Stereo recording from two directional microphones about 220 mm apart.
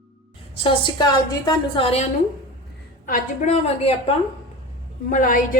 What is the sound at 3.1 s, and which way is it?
A woman's voice, 30° left (ahead or behind).